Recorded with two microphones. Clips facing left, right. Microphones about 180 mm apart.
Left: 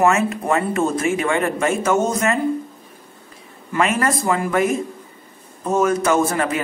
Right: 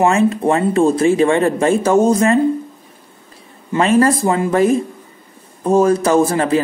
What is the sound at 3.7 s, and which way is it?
Speech, 30° right (ahead or behind).